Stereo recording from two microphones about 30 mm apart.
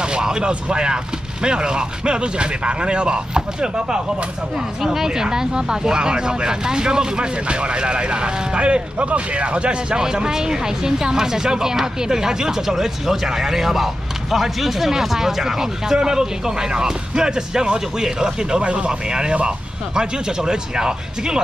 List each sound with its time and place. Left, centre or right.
0.0 s a sound: right
0.5 s speech: right
4.6 s speech: centre; by 9.9 s right
9.9 s speech: right